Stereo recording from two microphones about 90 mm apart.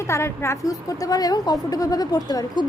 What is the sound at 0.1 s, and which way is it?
A woman's voice, 30° left (ahead or behind).